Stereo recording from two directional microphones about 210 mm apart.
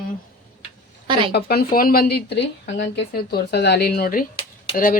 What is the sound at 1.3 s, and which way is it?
Speech, 50° left (ahead or behind).